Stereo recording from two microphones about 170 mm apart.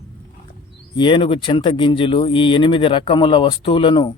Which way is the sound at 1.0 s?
30° left (ahead or behind).